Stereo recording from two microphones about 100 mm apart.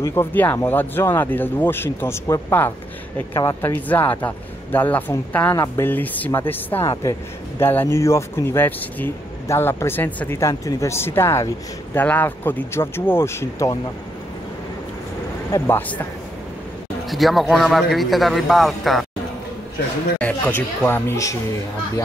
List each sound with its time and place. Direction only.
0.0 s speech: 25° left (ahead or behind)
6.9 s speech: 30° left (ahead or behind)
10.5 s speech: 35° left (ahead or behind)
15.5 s speech: 25° left (ahead or behind)
17.1 s a man's voice: centre (ahead or behind)
20.2 s speech: 15° left (ahead or behind)